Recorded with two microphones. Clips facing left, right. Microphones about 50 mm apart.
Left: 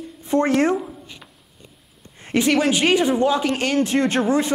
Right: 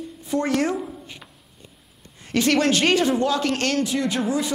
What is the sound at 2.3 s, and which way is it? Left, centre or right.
A woman's voice, centre.